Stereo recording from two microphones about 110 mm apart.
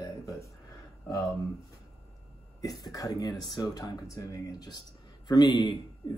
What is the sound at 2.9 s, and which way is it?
Speech, 35° left (ahead or behind).